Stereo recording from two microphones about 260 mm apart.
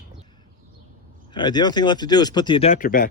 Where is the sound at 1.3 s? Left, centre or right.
Centre; by 3.0 s left.